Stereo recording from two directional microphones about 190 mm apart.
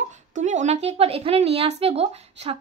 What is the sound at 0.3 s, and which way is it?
A woman's voice, 40° right (ahead or behind).